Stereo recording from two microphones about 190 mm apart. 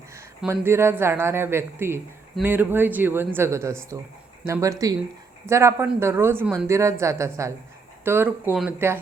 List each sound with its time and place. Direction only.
0.1 s speech: 15° right (ahead or behind)